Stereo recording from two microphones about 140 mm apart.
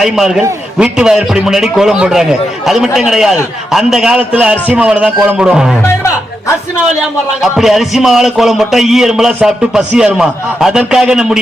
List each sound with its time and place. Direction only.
0.0 s a man's voice: 5° right (ahead or behind)
7.4 s a man's voice: centre (ahead or behind)